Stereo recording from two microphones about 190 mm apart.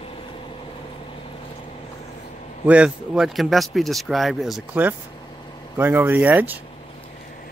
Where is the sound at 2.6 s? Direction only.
5° right (ahead or behind).